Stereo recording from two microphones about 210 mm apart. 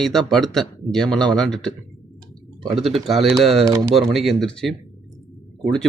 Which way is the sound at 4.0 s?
Centre (ahead or behind).